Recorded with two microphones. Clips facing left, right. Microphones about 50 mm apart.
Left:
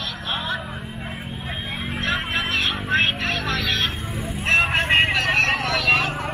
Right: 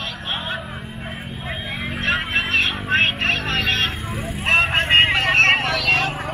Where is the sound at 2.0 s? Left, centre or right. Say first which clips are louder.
Right 3 dB; right.